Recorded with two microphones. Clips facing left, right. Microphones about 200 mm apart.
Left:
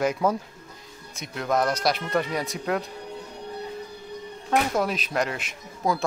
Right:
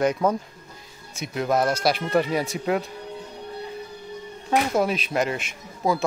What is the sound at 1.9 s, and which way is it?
Speech, 5° right (ahead or behind).